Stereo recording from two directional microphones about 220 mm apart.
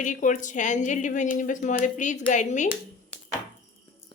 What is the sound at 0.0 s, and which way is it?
Speech, 35° left (ahead or behind).